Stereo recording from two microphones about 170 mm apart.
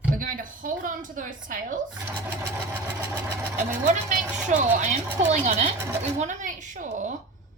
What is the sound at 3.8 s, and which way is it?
A woman's voice, 45° right (ahead or behind).